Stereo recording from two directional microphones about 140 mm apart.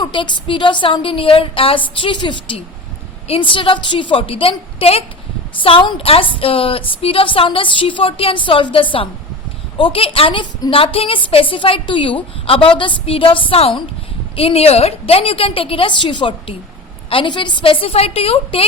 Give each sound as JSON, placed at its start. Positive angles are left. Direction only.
{"t": 0.0, "sound": "a woman's voice", "side_deg": 35}